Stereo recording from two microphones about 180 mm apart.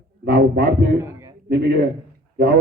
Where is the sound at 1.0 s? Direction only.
15° right (ahead or behind).